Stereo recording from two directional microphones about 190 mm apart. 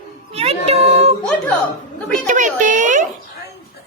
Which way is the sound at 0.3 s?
35° right (ahead or behind).